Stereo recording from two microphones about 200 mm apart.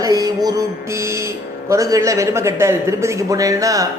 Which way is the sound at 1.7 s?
15° right (ahead or behind).